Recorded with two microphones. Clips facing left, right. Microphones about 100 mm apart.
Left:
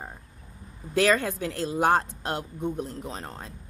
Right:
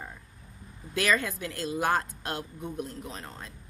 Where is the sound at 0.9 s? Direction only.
35° left (ahead or behind).